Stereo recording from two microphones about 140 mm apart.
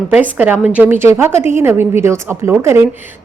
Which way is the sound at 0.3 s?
10° right (ahead or behind).